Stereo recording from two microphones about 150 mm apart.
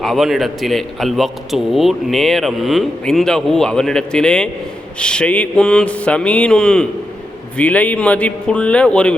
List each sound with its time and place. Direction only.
0.0 s a man's voice: centre (ahead or behind)